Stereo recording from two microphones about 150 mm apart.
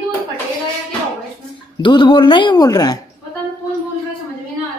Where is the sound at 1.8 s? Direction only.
30° left (ahead or behind).